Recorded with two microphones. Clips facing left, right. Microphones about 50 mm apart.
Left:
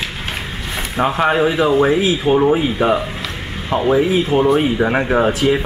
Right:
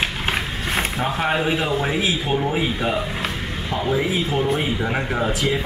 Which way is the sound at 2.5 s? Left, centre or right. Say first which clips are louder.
Left 7 dB; left.